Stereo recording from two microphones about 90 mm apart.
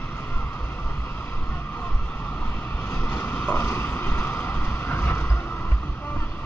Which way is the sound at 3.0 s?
20° left (ahead or behind).